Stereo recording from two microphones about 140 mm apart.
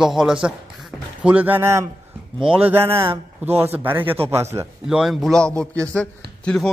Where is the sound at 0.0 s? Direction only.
5° right (ahead or behind); by 4.6 s 20° right (ahead or behind).